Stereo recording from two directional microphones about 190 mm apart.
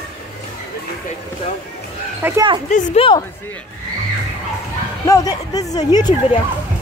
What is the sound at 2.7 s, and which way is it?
Speech, 30° left (ahead or behind).